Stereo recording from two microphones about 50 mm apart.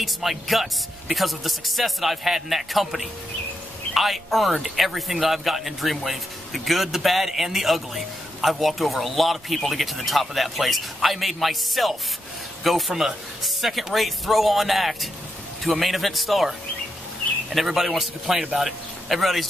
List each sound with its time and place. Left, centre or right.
0.0 s speech: centre